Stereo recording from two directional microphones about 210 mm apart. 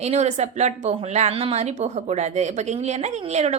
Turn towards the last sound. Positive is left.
turn(degrees=-30)  # may be behind; listen again after turning